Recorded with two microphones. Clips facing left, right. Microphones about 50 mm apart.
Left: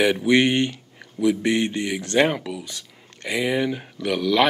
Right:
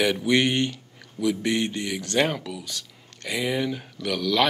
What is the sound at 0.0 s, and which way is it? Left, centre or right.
Speech, centre.